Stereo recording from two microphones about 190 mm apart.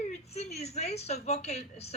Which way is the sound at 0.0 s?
35° left (ahead or behind).